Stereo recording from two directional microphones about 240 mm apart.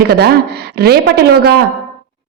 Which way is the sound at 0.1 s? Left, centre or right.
Right.